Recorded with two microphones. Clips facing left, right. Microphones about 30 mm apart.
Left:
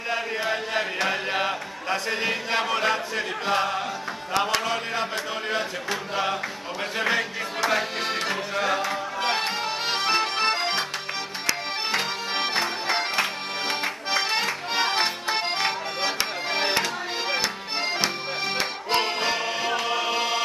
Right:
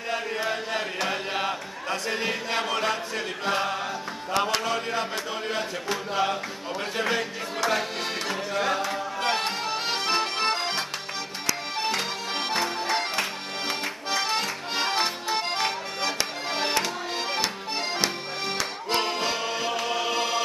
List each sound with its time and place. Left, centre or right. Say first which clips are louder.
0.1 s chant: left 2 dB; centre
4.6 s a sound: left 1 dB; centre
7.0 s music: left 3 dB; centre
18.9 s accordion: left 2 dB; centre